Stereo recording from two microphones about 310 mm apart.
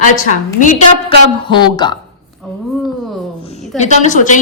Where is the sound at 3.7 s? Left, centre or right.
Left.